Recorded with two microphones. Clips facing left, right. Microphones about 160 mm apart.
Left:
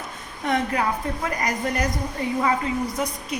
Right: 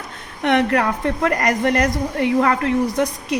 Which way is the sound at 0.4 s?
75° right (ahead or behind).